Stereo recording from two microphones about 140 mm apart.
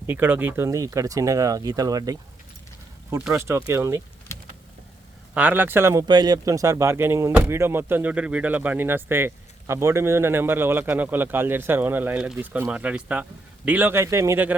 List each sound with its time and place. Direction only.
0.1 s speech: 15° right (ahead or behind)
3.3 s speech: 20° right (ahead or behind)
5.3 s speech: 10° right (ahead or behind)
6.1 s speech: 30° right (ahead or behind)